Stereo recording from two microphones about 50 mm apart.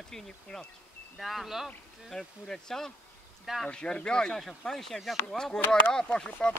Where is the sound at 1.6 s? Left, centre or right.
Centre.